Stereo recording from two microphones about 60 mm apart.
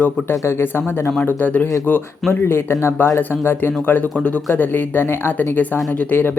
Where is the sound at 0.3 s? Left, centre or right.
Left.